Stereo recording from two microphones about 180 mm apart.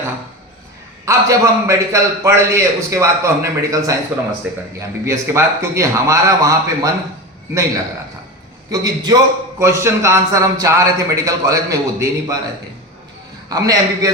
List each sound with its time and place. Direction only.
1.0 s a man's voice: 15° right (ahead or behind)
8.7 s a man's voice: 20° right (ahead or behind)
13.5 s a man's voice: 20° right (ahead or behind)